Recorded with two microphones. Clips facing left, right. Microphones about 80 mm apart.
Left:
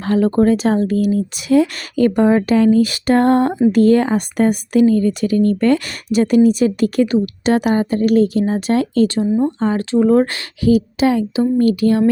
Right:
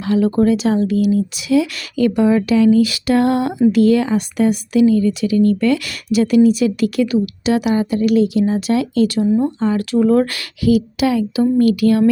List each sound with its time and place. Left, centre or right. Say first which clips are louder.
0.0 s speech: left 1 dB; left